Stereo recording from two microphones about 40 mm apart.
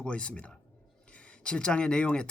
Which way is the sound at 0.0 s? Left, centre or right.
Left.